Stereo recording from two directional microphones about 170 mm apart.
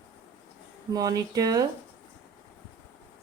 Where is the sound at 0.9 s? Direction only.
20° right (ahead or behind).